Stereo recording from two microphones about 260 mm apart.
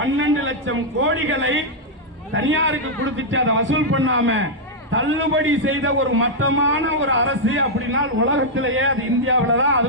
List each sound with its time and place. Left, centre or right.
0.0 s a man's voice: right